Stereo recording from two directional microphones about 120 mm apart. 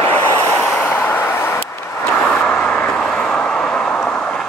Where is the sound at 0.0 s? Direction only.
20° left (ahead or behind).